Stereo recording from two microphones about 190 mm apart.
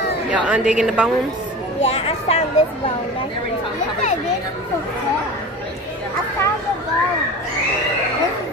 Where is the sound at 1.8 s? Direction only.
30° left (ahead or behind).